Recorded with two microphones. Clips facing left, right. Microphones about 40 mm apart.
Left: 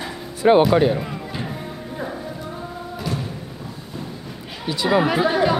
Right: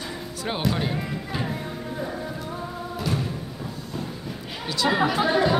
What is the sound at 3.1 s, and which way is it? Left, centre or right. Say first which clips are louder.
Music: even; centre.